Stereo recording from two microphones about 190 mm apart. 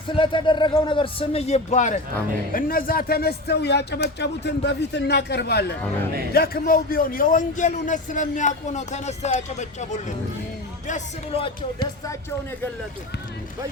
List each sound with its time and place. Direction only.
0.1 s a man's voice: 25° left (ahead or behind)